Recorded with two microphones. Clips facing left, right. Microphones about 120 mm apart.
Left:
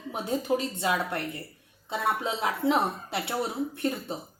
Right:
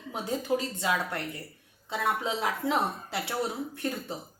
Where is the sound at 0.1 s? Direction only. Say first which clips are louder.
Left 2 dB; 20° left (ahead or behind).